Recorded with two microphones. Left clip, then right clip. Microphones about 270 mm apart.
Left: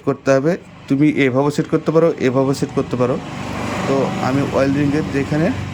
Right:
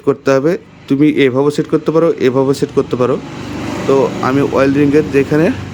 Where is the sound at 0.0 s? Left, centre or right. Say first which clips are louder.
Right 4 dB; centre.